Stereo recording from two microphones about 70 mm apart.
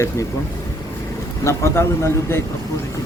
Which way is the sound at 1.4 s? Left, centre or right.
Left.